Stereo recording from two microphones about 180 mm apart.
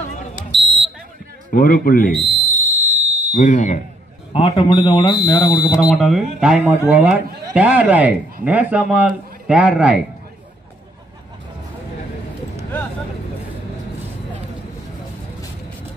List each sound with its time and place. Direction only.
0.5 s smoke detector: 80° right
1.5 s a man's voice: 55° left (ahead or behind)
2.2 s a sound: 60° right (ahead or behind)
3.3 s a man's voice: 45° left (ahead or behind)
4.3 s speech: 30° left (ahead or behind)
5.8 s speech: centre (ahead or behind)